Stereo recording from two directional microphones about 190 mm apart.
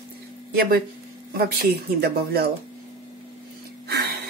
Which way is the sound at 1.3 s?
55° right (ahead or behind).